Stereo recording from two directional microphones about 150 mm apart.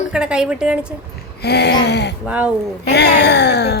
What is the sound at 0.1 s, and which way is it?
Speech, 5° right (ahead or behind).